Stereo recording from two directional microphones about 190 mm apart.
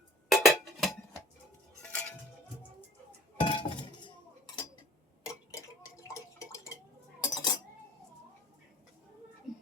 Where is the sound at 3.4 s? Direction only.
25° left (ahead or behind).